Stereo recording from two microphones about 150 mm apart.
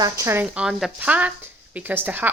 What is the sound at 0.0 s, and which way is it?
Speech, 20° right (ahead or behind).